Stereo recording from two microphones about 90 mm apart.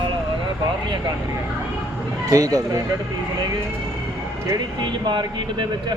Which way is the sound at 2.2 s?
40° right (ahead or behind).